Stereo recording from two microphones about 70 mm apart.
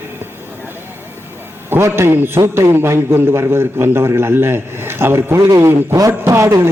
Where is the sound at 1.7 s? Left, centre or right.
Right.